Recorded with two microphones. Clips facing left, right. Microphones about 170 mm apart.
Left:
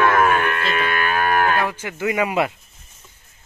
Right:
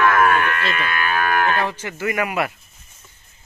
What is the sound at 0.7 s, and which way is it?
Speech, 30° left (ahead or behind).